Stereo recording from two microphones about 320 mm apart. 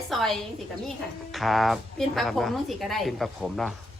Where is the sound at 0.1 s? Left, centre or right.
Centre.